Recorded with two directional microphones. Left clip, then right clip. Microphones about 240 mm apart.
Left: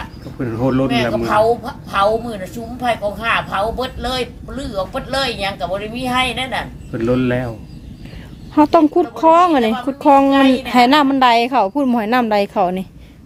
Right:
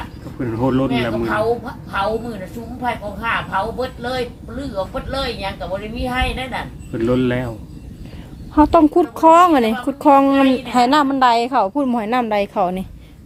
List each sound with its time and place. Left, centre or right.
0.3 s a woman's voice: centre
1.2 s a woman's voice: left
6.9 s a woman's voice: centre
8.5 s a woman's voice: centre
8.9 s a woman's voice: centre